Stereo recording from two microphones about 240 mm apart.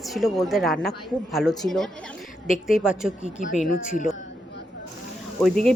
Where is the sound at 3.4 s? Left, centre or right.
Left.